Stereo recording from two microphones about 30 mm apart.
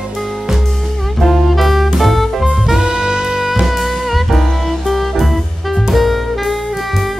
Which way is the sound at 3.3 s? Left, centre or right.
Centre.